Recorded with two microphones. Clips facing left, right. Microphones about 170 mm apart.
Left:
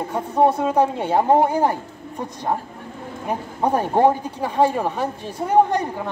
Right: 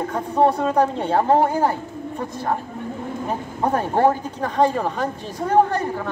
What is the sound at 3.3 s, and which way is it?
Speech, 15° left (ahead or behind).